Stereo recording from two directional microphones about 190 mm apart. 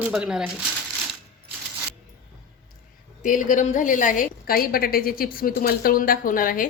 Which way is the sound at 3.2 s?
45° left (ahead or behind).